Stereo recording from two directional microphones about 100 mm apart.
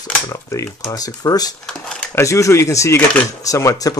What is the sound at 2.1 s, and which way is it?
Speech, 30° left (ahead or behind).